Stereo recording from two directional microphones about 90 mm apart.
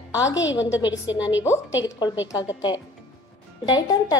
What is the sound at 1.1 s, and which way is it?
Speech, 55° left (ahead or behind).